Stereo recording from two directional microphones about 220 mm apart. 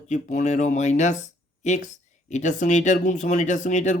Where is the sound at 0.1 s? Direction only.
35° left (ahead or behind).